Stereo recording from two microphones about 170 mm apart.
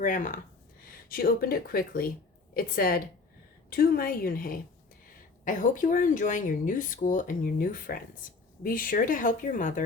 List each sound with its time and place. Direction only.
0.0 s speech: 50° left (ahead or behind)